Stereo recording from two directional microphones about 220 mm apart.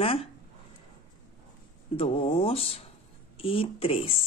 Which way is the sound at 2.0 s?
25° left (ahead or behind).